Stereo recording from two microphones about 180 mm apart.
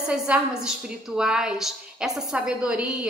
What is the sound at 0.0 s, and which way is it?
A woman's voice, 5° right (ahead or behind).